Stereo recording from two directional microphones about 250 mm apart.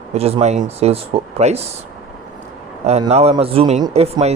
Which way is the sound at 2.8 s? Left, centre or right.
Right.